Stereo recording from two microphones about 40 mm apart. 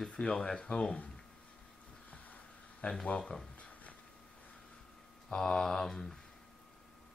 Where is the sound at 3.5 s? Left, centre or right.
Left.